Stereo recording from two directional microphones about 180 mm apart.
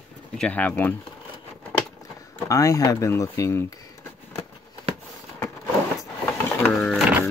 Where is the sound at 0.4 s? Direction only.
10° left (ahead or behind).